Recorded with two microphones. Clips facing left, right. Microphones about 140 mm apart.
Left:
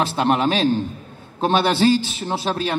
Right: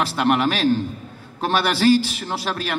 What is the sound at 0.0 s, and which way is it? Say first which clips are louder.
A man's voice: left 1 dB; 20° left (ahead or behind).